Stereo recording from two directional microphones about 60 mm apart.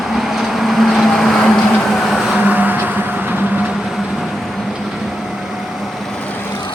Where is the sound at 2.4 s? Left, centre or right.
Right.